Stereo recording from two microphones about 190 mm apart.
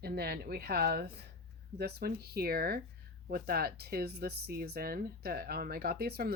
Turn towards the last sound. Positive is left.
turn(degrees=-55)  # may be behind; listen again after turning